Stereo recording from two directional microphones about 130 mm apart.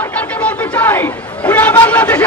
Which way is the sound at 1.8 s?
10° left (ahead or behind).